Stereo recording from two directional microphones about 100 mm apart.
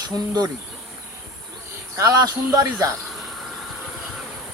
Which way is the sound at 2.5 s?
40° right (ahead or behind).